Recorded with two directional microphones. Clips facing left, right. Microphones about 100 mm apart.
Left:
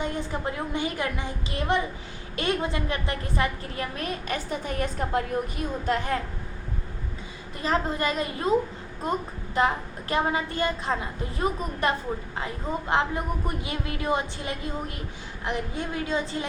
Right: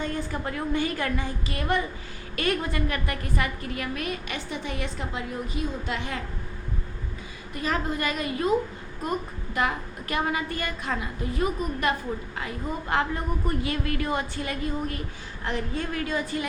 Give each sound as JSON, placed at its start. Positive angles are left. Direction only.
{"t": 0.0, "sound": "a woman's voice", "side_deg": 20}
{"t": 7.5, "sound": "a woman's voice", "side_deg": 30}
{"t": 12.9, "sound": "a woman's voice", "side_deg": 20}